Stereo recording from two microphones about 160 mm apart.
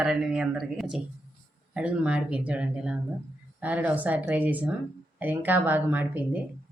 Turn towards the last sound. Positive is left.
turn(degrees=-10)  # may be behind; listen again after turning